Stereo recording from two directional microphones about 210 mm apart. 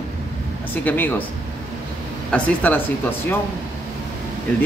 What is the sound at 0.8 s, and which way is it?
Speech, 10° left (ahead or behind).